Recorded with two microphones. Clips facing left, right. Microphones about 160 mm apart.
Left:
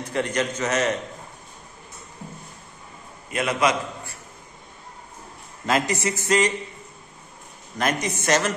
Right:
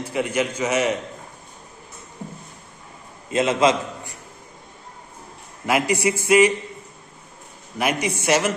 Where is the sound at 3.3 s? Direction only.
25° right (ahead or behind).